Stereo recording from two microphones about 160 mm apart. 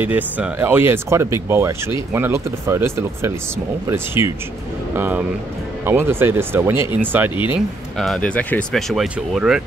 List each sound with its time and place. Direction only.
0.0 s speech: 10° right (ahead or behind)
7.5 s speech: centre (ahead or behind)